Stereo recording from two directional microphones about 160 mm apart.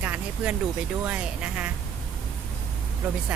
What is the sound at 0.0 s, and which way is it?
Vehicle, 10° right (ahead or behind).